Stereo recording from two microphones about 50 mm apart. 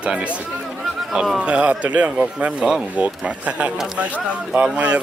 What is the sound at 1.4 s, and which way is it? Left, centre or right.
A man's voice, right.